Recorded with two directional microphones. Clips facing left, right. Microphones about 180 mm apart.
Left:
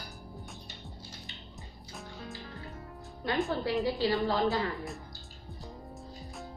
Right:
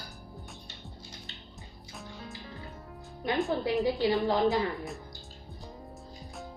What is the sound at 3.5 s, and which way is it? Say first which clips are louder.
A woman's voice: right 2 dB; 15° right (ahead or behind).